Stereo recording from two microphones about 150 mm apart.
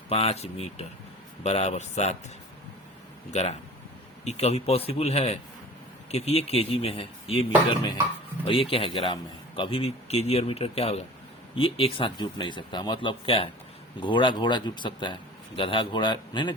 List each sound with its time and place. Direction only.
0.1 s a man's voice: 45° left (ahead or behind)
4.2 s a man's voice: 45° left (ahead or behind)